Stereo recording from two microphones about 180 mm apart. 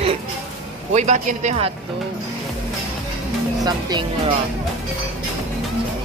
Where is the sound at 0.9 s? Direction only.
40° right (ahead or behind).